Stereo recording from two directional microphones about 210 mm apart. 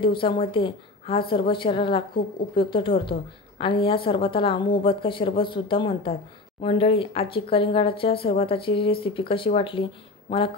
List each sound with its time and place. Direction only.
0.0 s a woman's voice: 25° left (ahead or behind)